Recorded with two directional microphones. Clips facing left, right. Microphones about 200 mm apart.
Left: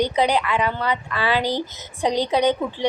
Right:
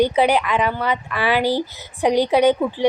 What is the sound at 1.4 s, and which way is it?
Speech, 15° left (ahead or behind).